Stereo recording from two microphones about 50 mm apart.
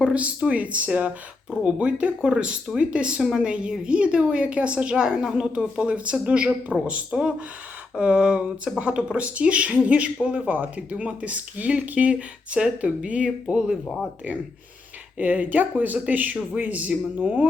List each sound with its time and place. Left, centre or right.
0.1 s speech: right
15.2 s speech: right